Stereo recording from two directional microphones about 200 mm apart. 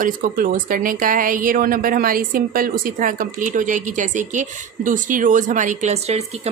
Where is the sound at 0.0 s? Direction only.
45° right (ahead or behind).